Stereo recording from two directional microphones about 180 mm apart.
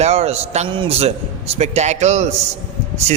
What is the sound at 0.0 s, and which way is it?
A man's voice, 35° right (ahead or behind).